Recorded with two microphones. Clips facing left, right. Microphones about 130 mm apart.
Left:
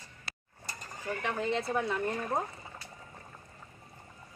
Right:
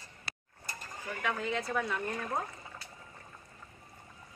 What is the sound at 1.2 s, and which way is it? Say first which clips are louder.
Speech: left 1 dB; 25° left (ahead or behind).